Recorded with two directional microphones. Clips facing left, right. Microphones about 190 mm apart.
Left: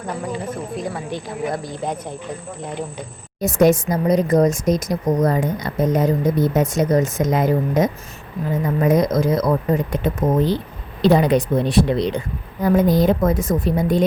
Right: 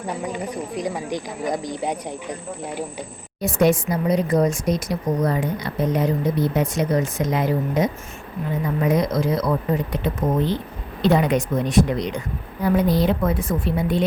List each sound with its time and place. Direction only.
0.4 s speech: 15° right (ahead or behind)
3.4 s speech: 45° left (ahead or behind)
12.6 s speech: 45° left (ahead or behind)